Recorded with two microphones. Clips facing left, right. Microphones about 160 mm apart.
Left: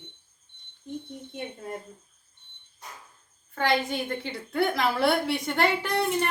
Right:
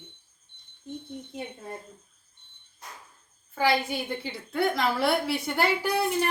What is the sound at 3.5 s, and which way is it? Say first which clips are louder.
A woman's voice: even; 5° right (ahead or behind).